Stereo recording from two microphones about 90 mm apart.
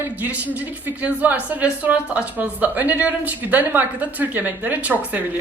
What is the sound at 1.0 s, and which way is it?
A woman's voice, 15° right (ahead or behind).